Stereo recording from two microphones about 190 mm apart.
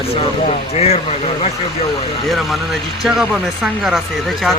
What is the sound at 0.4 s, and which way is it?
Speech, 30° left (ahead or behind).